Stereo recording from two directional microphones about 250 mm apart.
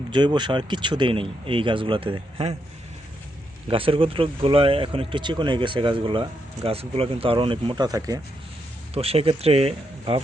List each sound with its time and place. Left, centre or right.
0.1 s speech: centre
3.7 s speech: right